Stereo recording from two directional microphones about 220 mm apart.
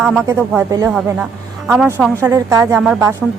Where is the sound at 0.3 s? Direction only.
10° right (ahead or behind).